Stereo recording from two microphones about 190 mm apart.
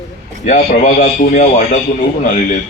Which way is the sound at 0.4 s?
45° left (ahead or behind).